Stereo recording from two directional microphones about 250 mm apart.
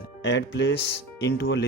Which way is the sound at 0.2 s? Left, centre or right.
Left.